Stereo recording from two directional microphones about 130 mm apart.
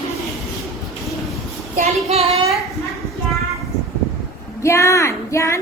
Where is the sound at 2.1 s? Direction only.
50° right (ahead or behind).